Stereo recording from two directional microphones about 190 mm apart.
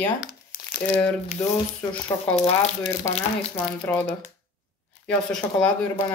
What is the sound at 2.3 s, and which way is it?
Speech, 35° left (ahead or behind).